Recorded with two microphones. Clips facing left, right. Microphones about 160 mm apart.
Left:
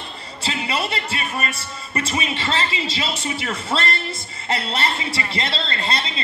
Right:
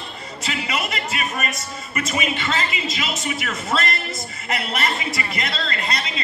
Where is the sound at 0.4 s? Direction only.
30° left (ahead or behind).